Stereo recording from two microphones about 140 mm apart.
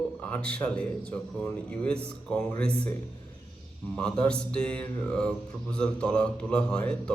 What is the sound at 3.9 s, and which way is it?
A man's voice, 10° left (ahead or behind).